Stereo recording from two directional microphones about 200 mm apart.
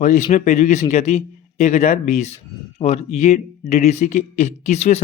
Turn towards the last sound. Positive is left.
turn(degrees=35)  # may be behind; listen again after turning